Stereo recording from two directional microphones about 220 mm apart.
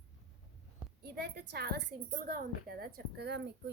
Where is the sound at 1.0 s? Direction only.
45° right (ahead or behind).